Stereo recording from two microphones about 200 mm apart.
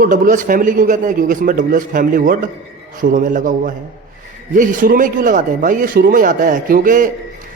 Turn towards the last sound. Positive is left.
turn(degrees=-40)  # may be behind; listen again after turning